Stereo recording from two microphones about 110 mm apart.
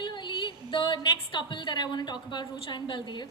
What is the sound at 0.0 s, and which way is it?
A woman's voice, 45° left (ahead or behind).